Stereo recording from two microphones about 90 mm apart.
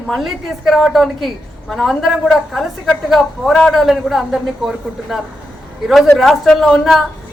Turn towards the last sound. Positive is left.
turn(degrees=0)  # may be behind; listen again after turning